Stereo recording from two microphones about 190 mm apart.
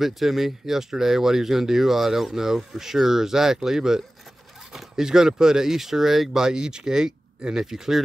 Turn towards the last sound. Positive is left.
turn(degrees=0)  # may be behind; listen again after turning